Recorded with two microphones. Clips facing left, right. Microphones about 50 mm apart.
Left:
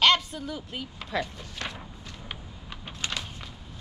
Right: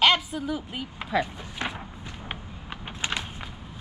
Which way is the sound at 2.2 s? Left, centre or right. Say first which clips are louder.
Right 4 dB; right.